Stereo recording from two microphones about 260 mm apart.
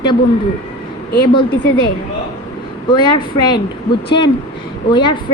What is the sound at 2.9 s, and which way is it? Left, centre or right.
Speech, centre.